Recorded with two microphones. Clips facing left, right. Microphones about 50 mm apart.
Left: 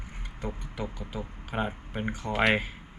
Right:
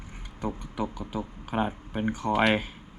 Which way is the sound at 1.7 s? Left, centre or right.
Left.